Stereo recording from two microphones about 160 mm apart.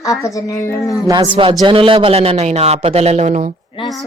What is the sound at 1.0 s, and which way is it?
A man's voice, 30° right (ahead or behind).